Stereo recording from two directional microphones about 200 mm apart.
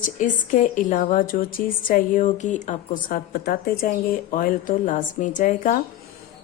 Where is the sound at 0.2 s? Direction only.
40° left (ahead or behind).